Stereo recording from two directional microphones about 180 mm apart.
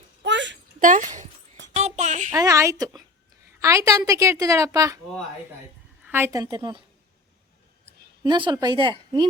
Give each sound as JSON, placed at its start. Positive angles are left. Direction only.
{"t": 0.2, "sound": "a sound", "side_deg": -85}
{"t": 0.8, "sound": "a child's voice", "side_deg": -45}
{"t": 1.7, "sound": "a sound", "side_deg": -40}
{"t": 2.3, "sound": "a woman's voice", "side_deg": -15}
{"t": 6.1, "sound": "a woman's voice", "side_deg": -10}
{"t": 8.2, "sound": "a woman's voice", "side_deg": -25}